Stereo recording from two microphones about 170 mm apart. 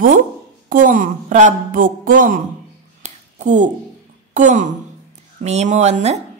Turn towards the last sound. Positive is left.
turn(degrees=-45)  # may be behind; listen again after turning